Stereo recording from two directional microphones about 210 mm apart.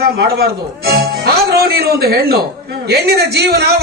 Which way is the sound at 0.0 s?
50° right (ahead or behind).